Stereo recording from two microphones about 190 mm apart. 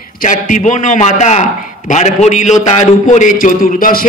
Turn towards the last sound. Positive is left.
turn(degrees=50)  # may be behind; listen again after turning